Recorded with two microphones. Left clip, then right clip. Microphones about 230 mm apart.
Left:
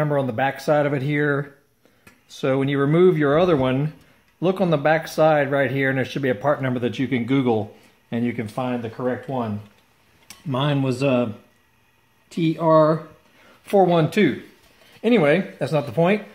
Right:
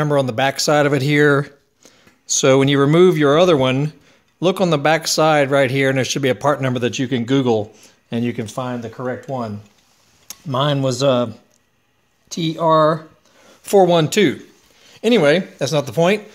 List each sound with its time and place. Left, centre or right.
0.0 s speech: right
12.3 s speech: right
13.7 s speech: right